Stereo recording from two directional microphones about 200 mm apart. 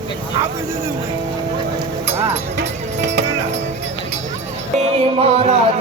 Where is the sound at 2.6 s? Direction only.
55° right (ahead or behind).